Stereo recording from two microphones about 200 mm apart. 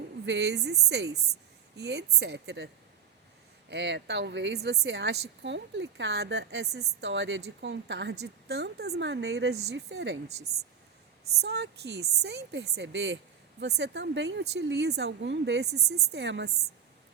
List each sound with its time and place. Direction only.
0.3 s speech: 55° right (ahead or behind)
3.7 s speech: 60° right (ahead or behind)
10.2 s speech: 35° right (ahead or behind)
11.3 s speech: 60° right (ahead or behind)